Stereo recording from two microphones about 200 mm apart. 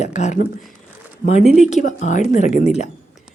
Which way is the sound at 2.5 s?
40° right (ahead or behind).